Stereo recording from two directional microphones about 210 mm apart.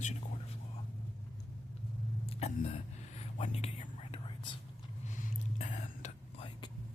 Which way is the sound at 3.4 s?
30° left (ahead or behind).